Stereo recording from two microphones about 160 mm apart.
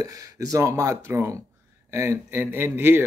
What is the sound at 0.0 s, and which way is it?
Speech, 20° right (ahead or behind).